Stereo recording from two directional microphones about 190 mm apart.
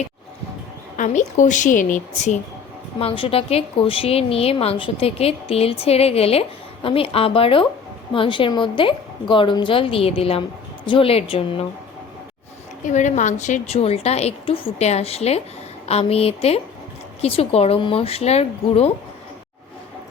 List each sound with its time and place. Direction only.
0.9 s a woman's voice: 40° left (ahead or behind)
3.0 s a woman's voice: 30° left (ahead or behind)
12.8 s a woman's voice: 40° left (ahead or behind)